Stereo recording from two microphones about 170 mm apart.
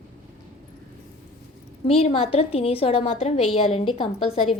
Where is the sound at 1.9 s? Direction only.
35° left (ahead or behind).